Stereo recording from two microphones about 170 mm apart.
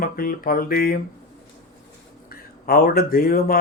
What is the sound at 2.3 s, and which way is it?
Speech, 60° left (ahead or behind).